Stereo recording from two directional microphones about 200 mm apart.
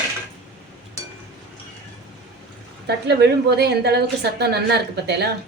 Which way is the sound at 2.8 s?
55° right (ahead or behind).